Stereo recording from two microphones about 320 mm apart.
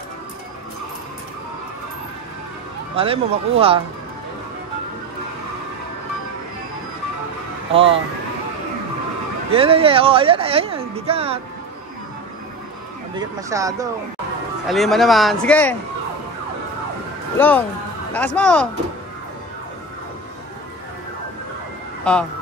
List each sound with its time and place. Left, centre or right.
3.0 s speech: centre
7.7 s speech: centre
9.5 s speech: centre
13.1 s speech: centre
14.7 s speech: centre
17.4 s speech: centre
22.1 s speech: centre